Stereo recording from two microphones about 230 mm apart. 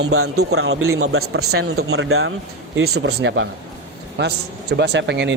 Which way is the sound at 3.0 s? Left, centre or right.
Right.